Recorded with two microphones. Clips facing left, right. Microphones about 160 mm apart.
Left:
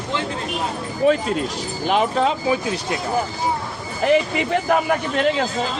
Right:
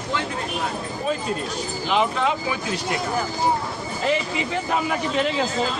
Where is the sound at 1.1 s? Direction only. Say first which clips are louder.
Left 8 dB; 75° left (ahead or behind).